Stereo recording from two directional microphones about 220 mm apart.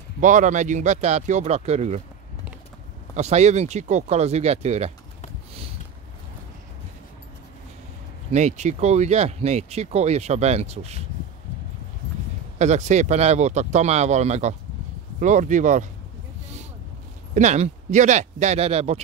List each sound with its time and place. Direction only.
0.2 s speech: 35° right (ahead or behind)
3.2 s speech: 30° right (ahead or behind)
8.3 s speech: 30° right (ahead or behind)
12.5 s speech: 30° right (ahead or behind)
17.3 s speech: 30° right (ahead or behind)